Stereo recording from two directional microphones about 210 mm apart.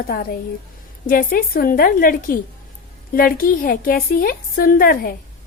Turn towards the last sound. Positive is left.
turn(degrees=45)  # may be behind; listen again after turning